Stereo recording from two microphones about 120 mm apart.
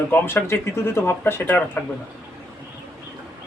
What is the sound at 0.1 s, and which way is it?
Speech, 20° left (ahead or behind).